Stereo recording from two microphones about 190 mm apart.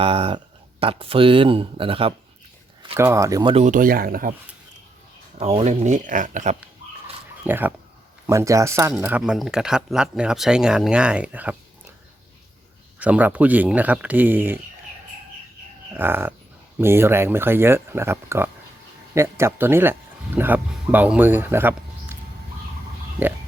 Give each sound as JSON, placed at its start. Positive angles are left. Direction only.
{"t": 0.0, "sound": "speech", "side_deg": -30}
{"t": 2.9, "sound": "speech", "side_deg": -15}
{"t": 3.5, "sound": "speech", "side_deg": -40}
{"t": 5.4, "sound": "speech", "side_deg": -35}
{"t": 7.4, "sound": "speech", "side_deg": -10}
{"t": 13.0, "sound": "speech", "side_deg": -10}
{"t": 16.0, "sound": "speech", "side_deg": -10}